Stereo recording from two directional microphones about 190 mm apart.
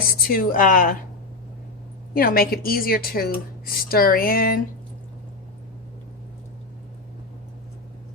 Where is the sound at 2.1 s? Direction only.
50° left (ahead or behind).